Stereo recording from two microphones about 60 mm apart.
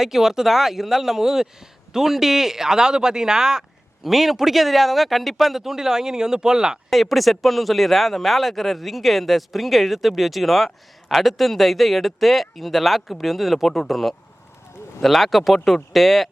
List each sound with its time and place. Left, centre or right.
0.0 s speech: centre
6.9 s speech: centre